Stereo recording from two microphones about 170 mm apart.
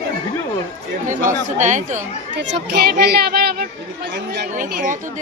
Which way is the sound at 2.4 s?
85° right.